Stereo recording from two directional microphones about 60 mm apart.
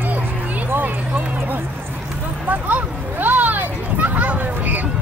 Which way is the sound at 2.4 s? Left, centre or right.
Right.